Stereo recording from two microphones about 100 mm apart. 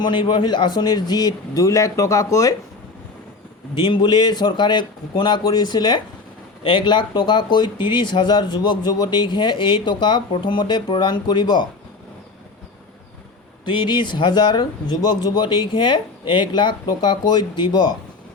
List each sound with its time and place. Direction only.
0.0 s speech: 50° left (ahead or behind); by 2.6 s 35° left (ahead or behind)
3.8 s speech: 45° left (ahead or behind)
13.7 s speech: 50° left (ahead or behind)